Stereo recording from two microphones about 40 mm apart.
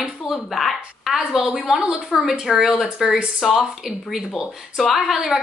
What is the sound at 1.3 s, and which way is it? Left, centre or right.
Speech, right.